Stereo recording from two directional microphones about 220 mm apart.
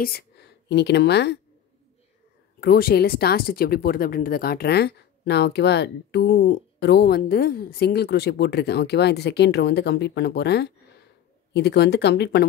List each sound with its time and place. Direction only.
0.0 s speech: 45° left (ahead or behind)
2.6 s speech: 45° left (ahead or behind)